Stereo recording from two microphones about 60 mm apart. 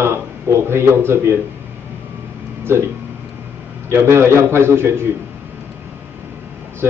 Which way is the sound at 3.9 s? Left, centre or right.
Right.